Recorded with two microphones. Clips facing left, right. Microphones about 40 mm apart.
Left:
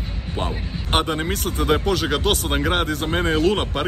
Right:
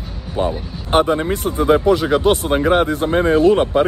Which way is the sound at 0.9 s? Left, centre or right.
Left.